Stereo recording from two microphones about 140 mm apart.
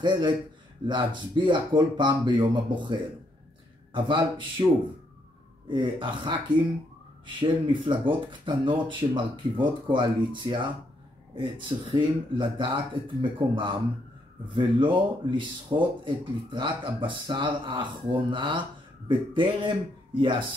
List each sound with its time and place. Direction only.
0.0 s speech: 35° right (ahead or behind)
5.7 s speech: 35° right (ahead or behind)